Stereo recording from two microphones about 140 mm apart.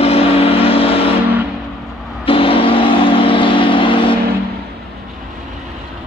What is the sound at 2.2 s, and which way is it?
Vehicle, 40° left (ahead or behind).